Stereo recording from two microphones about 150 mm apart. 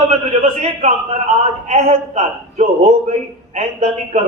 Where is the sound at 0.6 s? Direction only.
50° right (ahead or behind).